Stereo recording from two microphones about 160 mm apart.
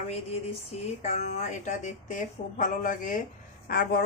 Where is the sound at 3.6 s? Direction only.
65° left (ahead or behind).